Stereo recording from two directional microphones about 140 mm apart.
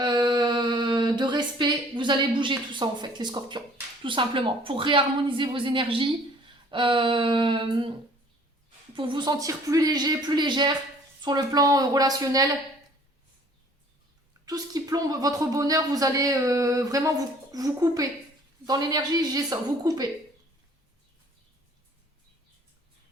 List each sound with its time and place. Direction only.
0.0 s a sound: 35° right (ahead or behind)
4.0 s speech: 35° right (ahead or behind)
9.0 s speech: 35° right (ahead or behind)
14.4 s speech: 25° right (ahead or behind)